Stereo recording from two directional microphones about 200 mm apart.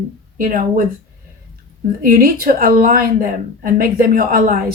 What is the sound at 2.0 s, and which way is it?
A woman's voice, 45° right (ahead or behind).